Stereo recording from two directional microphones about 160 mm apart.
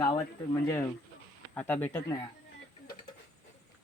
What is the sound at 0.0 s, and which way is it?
Speech, 20° left (ahead or behind).